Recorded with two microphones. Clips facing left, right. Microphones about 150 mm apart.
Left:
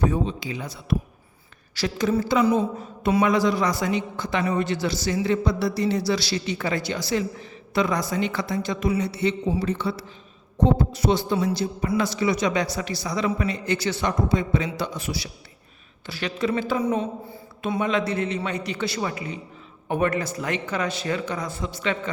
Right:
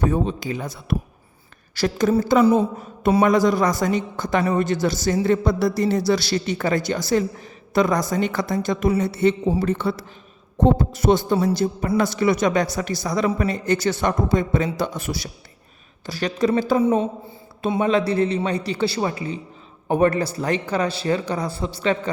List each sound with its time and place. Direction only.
0.1 s a woman's voice: 50° right (ahead or behind); by 22.1 s 35° right (ahead or behind)